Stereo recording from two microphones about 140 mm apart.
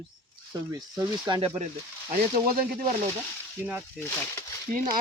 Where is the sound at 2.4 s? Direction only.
90° right.